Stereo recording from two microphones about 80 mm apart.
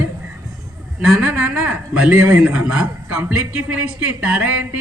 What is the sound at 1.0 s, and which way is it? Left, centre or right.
A man's voice, centre.